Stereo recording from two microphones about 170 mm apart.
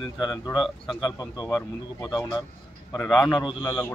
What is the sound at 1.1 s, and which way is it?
Speech, 20° left (ahead or behind).